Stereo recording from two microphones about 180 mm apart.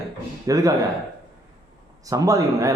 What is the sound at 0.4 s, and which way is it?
Speech, 20° right (ahead or behind).